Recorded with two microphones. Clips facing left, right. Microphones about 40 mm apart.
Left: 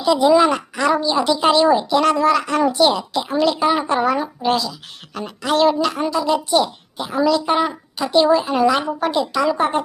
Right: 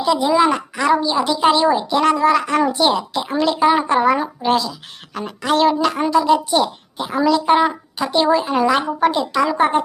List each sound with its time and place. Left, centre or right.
0.2 s speech: centre
0.5 s a woman's voice: right
1.9 s a woman's voice: right